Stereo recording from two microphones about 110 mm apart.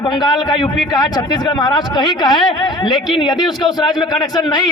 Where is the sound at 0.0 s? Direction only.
45° left (ahead or behind).